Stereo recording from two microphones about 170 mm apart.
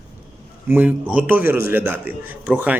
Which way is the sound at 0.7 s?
10° right (ahead or behind).